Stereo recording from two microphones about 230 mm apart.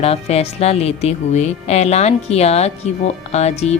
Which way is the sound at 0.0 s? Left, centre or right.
Left.